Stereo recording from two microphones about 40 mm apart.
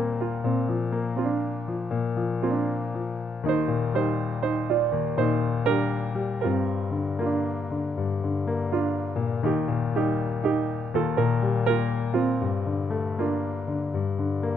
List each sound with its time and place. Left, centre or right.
0.0 s music: centre
2.4 s music: centre
9.4 s music: right